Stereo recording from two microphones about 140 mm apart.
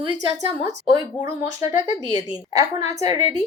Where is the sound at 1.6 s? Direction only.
50° left (ahead or behind).